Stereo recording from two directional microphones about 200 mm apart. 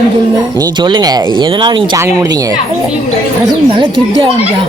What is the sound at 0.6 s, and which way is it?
Speech, 20° right (ahead or behind).